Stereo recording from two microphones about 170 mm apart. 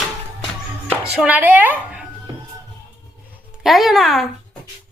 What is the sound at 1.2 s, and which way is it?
Speech, 10° right (ahead or behind).